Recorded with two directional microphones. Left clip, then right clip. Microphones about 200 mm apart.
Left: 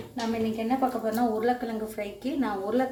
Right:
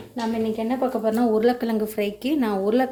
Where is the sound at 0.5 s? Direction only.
45° right (ahead or behind).